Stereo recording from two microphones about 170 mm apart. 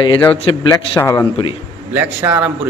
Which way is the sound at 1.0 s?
20° left (ahead or behind).